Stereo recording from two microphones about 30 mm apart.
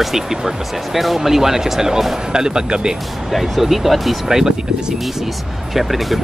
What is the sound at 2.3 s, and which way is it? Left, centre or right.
Speech, right.